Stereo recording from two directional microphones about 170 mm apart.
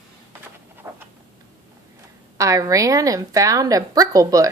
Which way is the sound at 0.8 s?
20° right (ahead or behind).